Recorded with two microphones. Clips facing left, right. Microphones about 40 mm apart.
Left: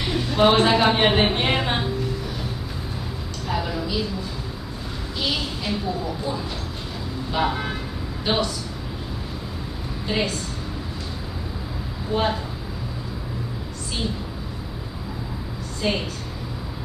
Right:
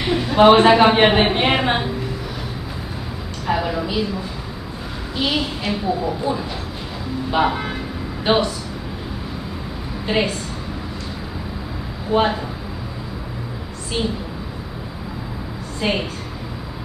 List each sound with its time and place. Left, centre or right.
0.0 s a man's voice: centre
3.4 s a sound: right
5.1 s a woman's voice: centre
10.0 s a woman's voice: right
12.1 s a man's voice: right
15.8 s a man's voice: right